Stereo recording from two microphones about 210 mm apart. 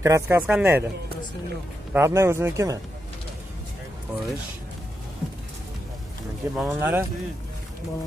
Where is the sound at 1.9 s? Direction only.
15° right (ahead or behind).